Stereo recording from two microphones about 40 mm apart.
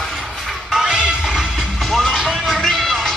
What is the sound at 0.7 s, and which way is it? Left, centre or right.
Music, right.